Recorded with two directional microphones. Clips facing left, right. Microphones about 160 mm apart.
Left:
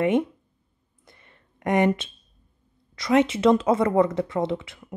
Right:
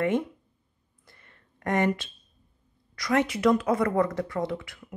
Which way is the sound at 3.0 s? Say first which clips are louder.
Left 4 dB; 25° left (ahead or behind).